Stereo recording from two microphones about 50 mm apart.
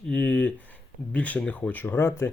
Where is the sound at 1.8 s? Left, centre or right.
Left.